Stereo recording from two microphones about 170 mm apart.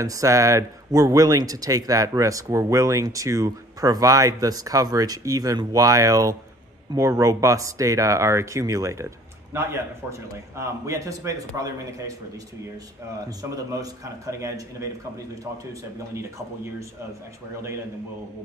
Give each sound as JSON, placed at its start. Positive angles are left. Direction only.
{"t": 0.0, "sound": "speech", "side_deg": -20}